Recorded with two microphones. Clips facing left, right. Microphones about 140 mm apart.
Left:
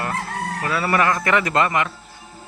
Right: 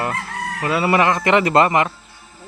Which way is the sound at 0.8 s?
20° right (ahead or behind).